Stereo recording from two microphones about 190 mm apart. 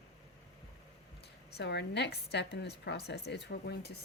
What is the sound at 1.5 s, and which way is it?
A woman's voice, 65° left (ahead or behind).